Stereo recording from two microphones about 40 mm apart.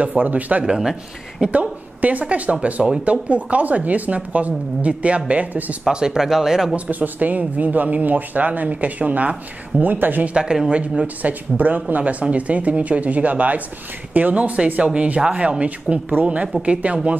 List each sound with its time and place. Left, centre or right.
0.0 s speech: right
0.7 s speech: centre
1.5 s a woman's voice: right
5.5 s speech: right
5.9 s speech: centre
6.9 s speech: right
9.8 s speech: right
10.3 s speech: right
11.5 s speech: right